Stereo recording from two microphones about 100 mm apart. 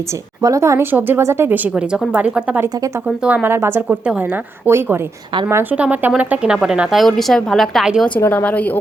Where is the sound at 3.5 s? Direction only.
25° right (ahead or behind).